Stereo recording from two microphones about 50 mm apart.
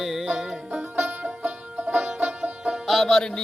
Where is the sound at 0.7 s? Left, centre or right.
Right.